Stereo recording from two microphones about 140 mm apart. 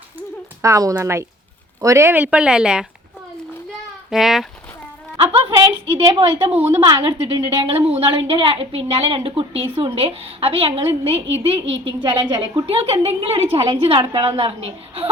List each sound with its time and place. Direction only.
0.2 s speech: 20° right (ahead or behind); by 2.8 s 5° right (ahead or behind)
4.1 s speech: centre (ahead or behind)
5.1 s a woman's voice: 40° right (ahead or behind)
6.5 s speech: 15° right (ahead or behind)
6.8 s a woman's voice: 35° right (ahead or behind)
7.6 s a woman's voice: 45° right (ahead or behind)